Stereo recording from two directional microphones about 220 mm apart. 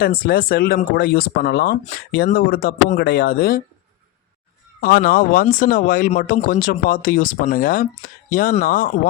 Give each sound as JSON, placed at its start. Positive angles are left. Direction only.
{"t": 0.0, "sound": "speech", "side_deg": 45}
{"t": 4.8, "sound": "speech", "side_deg": 45}